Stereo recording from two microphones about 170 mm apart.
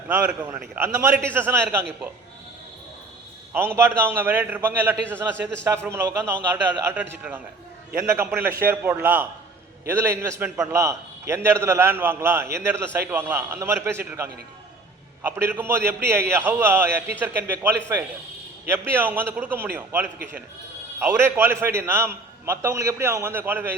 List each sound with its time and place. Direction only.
0.1 s a man's voice: 10° right (ahead or behind)
3.5 s a man's voice: 15° right (ahead or behind)
8.6 s a man's voice: 10° right (ahead or behind)
18.7 s a man's voice: 10° right (ahead or behind)